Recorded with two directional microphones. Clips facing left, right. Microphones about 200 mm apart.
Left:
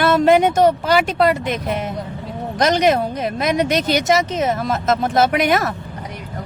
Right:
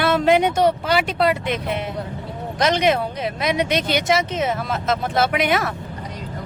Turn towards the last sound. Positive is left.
turn(degrees=40)  # may be behind; listen again after turning